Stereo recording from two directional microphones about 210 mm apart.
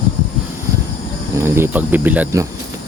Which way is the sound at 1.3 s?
10° right (ahead or behind).